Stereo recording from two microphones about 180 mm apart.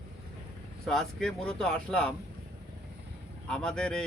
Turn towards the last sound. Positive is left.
turn(degrees=5)  # may be behind; listen again after turning